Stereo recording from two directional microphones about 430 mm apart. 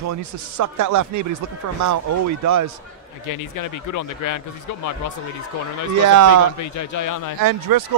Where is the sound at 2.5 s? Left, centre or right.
Right.